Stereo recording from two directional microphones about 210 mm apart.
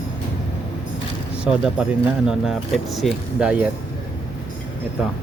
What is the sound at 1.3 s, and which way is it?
Speech, 5° right (ahead or behind).